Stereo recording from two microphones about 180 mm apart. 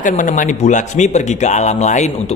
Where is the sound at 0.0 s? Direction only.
45° left (ahead or behind).